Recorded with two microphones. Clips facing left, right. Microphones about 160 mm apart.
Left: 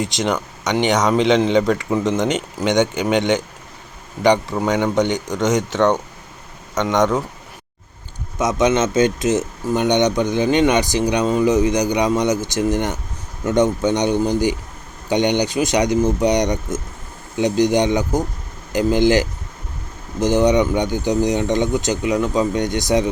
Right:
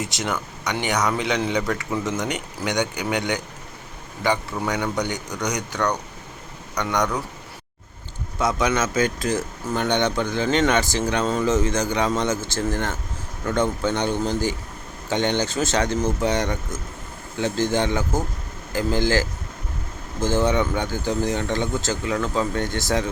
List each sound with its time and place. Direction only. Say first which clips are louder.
0.0 s speech: left 6 dB; 20° left (ahead or behind)
4.6 s speech: left 7 dB; 20° left (ahead or behind)
8.4 s speech: left 5 dB; 20° left (ahead or behind)